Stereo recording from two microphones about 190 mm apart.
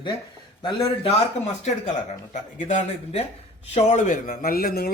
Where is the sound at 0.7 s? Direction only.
30° left (ahead or behind).